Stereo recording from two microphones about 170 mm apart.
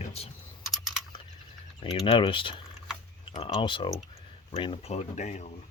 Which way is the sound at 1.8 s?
30° left (ahead or behind).